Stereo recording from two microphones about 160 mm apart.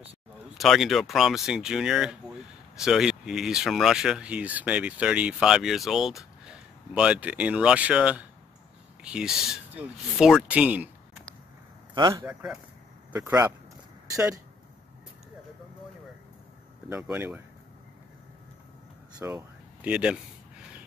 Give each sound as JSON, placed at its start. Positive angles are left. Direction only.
{"t": 0.6, "sound": "speech", "side_deg": 0}
{"t": 11.9, "sound": "a man's voice", "side_deg": -25}
{"t": 12.3, "sound": "speech", "side_deg": -5}
{"t": 16.9, "sound": "speech", "side_deg": -10}
{"t": 19.3, "sound": "a sound", "side_deg": -5}